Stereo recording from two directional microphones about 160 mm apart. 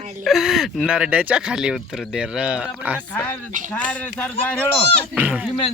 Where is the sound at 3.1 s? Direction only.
10° left (ahead or behind).